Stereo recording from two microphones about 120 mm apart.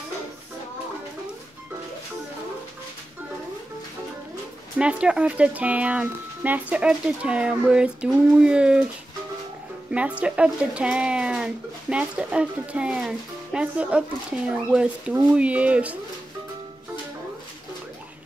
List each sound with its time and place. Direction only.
4.7 s speech: 10° right (ahead or behind)
9.8 s speech: 10° right (ahead or behind)